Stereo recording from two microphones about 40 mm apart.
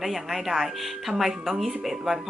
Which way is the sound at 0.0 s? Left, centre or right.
Centre.